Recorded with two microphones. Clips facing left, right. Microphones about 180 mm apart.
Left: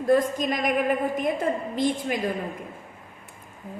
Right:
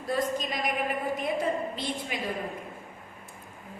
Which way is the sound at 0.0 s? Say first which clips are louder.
Left 8 dB; 50° left (ahead or behind).